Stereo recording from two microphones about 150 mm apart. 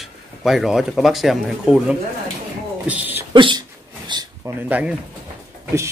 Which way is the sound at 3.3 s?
35° right (ahead or behind).